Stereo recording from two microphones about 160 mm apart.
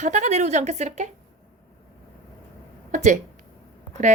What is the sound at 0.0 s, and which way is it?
Speech, 45° right (ahead or behind).